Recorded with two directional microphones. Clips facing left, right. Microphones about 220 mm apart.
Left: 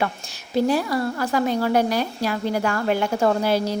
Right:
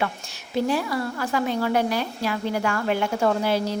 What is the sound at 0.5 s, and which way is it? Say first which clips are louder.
A woman's voice: left 3 dB; 40° left (ahead or behind).